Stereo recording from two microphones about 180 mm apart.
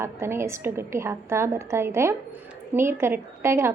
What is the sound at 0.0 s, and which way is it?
A woman's voice, 15° right (ahead or behind).